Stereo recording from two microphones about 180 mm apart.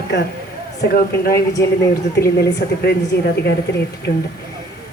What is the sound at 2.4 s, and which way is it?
Speech, 65° left (ahead or behind).